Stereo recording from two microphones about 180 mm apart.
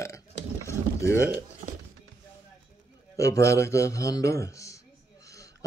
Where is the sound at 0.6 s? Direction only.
15° left (ahead or behind).